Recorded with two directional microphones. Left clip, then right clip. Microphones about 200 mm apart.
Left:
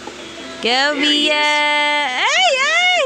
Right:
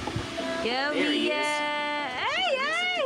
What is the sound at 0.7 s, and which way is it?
Music, 40° left (ahead or behind).